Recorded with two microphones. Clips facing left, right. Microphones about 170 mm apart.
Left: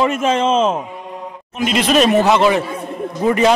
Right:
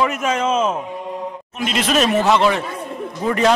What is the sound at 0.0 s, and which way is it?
Speech, 30° left (ahead or behind).